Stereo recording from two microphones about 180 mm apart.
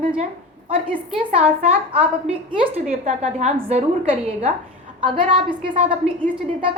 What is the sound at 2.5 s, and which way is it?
A woman's voice, 30° right (ahead or behind).